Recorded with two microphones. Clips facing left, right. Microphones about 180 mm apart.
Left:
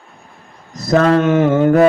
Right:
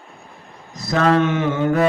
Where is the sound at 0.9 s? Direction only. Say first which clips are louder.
Left 5 dB; 40° left (ahead or behind).